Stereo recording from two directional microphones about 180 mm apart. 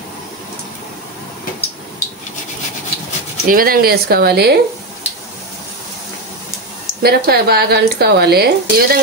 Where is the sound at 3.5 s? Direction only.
55° right (ahead or behind).